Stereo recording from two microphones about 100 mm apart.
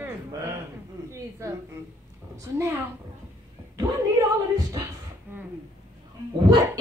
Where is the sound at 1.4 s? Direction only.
30° right (ahead or behind).